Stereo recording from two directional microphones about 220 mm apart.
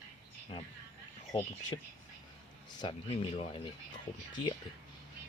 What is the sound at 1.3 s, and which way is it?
Speech, 15° left (ahead or behind).